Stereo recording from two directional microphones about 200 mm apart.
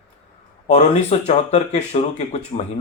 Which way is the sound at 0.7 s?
35° left (ahead or behind).